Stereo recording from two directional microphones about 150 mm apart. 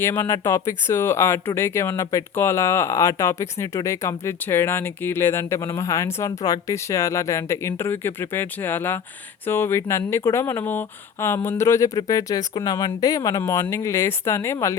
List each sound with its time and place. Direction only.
0.0 s speech: 15° left (ahead or behind)